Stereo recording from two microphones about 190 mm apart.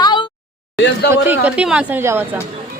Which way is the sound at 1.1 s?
10° right (ahead or behind).